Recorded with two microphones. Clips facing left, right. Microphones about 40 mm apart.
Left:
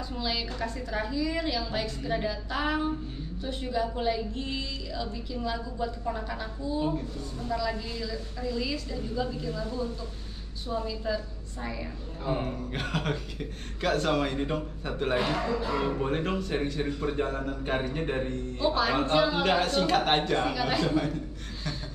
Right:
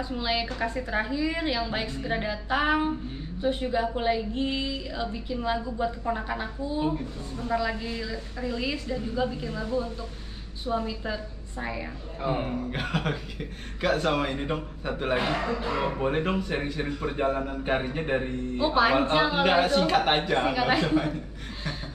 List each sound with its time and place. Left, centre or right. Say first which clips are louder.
0.1 s a man's voice: right 3 dB; right
15.1 s a man's voice: even; right
15.8 s a man's voice: right 2 dB; centre